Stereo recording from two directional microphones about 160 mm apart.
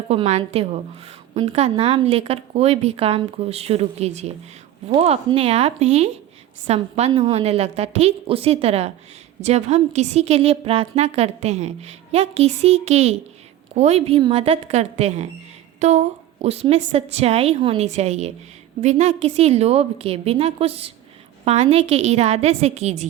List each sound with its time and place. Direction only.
0.1 s a woman's voice: 40° right (ahead or behind)